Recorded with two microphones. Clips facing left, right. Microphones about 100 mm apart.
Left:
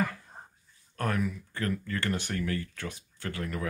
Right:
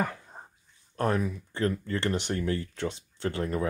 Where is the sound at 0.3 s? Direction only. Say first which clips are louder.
Right 2 dB; 10° right (ahead or behind).